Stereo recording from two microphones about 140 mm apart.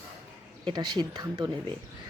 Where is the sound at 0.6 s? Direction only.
30° right (ahead or behind).